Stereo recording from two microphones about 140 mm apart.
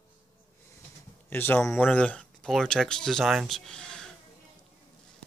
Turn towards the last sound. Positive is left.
turn(degrees=5)  # may be behind; listen again after turning